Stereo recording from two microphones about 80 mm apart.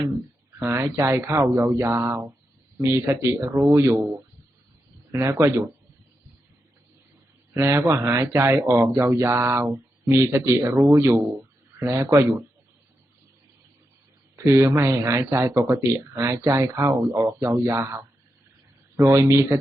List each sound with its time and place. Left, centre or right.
0.6 s speech: right
5.1 s speech: right
7.5 s speech: right
14.3 s speech: right